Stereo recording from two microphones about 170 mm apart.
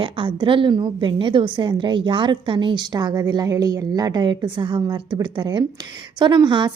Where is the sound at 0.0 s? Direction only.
30° right (ahead or behind).